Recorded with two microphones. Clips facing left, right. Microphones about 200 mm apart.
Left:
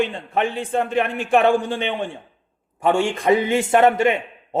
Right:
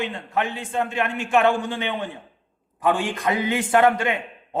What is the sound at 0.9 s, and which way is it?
Speech, 50° left (ahead or behind).